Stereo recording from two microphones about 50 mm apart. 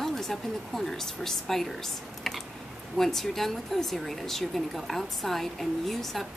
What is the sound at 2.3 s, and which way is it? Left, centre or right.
Typing, centre.